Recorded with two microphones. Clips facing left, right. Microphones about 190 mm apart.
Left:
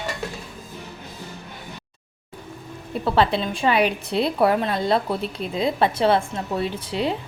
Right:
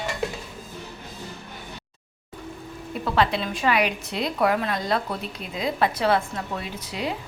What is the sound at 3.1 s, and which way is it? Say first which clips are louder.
A woman's voice: left 2 dB; 30° left (ahead or behind).